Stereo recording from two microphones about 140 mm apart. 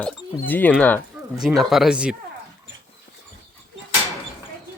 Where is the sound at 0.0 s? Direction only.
10° left (ahead or behind).